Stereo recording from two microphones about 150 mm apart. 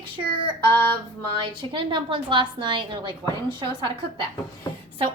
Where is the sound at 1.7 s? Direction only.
35° right (ahead or behind).